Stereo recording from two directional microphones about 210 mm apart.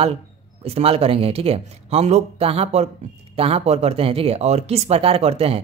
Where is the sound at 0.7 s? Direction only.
30° right (ahead or behind).